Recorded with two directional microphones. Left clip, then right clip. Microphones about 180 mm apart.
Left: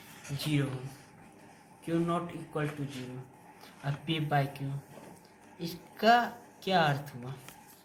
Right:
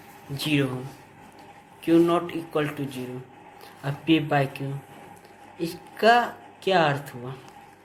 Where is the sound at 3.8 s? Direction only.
45° right (ahead or behind).